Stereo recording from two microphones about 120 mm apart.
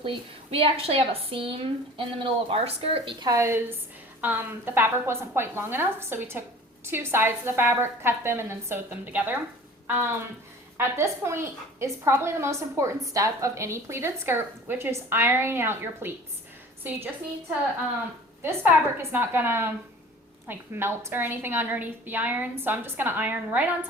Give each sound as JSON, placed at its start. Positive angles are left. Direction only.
{"t": 0.0, "sound": "speech", "side_deg": -50}
{"t": 3.2, "sound": "a woman's voice", "side_deg": -25}
{"t": 18.4, "sound": "a woman's voice", "side_deg": -20}